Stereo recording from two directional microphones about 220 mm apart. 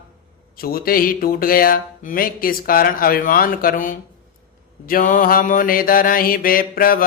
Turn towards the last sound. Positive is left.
turn(degrees=40)  # may be behind; listen again after turning